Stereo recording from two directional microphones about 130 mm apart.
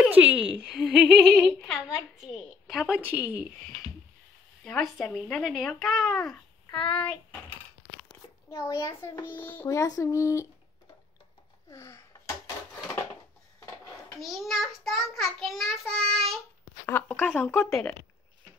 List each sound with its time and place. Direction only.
0.0 s a child's voice: 10° right (ahead or behind)
4.6 s child singing: centre (ahead or behind)
6.7 s child singing: 40° left (ahead or behind)
8.1 s a child's voice: 25° left (ahead or behind)
9.7 s speech: 30° left (ahead or behind)
11.7 s a sound: 25° left (ahead or behind)
14.2 s child singing: centre (ahead or behind)
16.8 s speech: 15° left (ahead or behind)